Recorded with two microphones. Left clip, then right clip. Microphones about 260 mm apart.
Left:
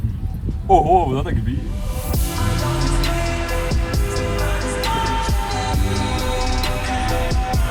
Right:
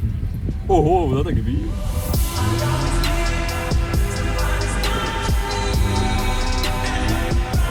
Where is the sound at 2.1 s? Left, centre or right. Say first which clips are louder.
Right 1 dB; centre.